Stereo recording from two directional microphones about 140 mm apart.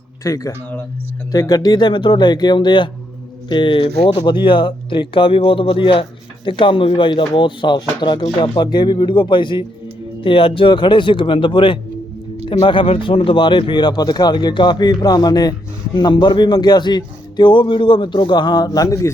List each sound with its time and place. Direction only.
0.2 s speech: 25° left (ahead or behind)